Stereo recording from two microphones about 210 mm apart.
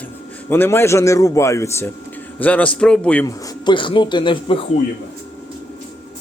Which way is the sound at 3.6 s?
25° left (ahead or behind).